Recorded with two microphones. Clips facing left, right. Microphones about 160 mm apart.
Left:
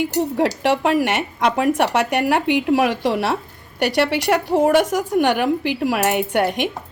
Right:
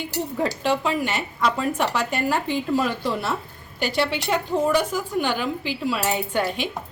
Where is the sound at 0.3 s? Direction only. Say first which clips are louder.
Left 3 dB; 80° left.